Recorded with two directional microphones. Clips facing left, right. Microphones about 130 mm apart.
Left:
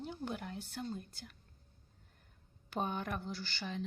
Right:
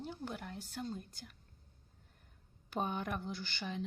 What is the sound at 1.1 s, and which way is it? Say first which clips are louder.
Speech: left 1 dB; 15° right (ahead or behind).